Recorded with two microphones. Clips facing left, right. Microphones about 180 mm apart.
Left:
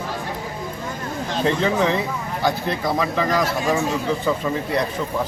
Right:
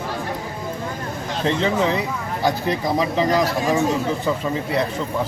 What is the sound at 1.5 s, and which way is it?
Speech, 5° left (ahead or behind).